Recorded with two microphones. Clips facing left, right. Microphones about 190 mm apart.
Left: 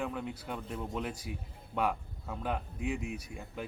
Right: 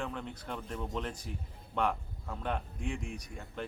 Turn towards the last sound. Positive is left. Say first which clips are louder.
# even
turn(degrees=5)  # may be behind; listen again after turning